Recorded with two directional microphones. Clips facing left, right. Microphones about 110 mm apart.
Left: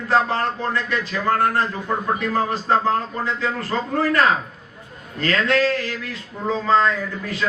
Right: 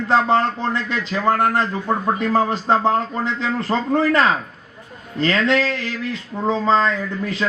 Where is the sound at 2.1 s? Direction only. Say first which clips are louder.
Right 3 dB; 20° right (ahead or behind).